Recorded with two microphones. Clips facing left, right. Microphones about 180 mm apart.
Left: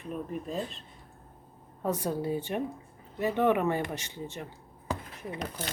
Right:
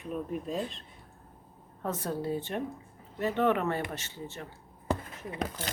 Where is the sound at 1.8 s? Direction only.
15° left (ahead or behind).